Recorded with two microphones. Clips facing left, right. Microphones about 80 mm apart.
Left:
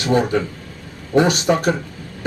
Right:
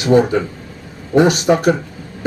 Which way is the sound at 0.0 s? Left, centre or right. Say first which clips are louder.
Right 5 dB; centre.